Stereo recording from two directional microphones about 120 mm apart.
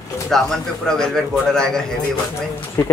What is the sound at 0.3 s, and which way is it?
Speech, 5° left (ahead or behind).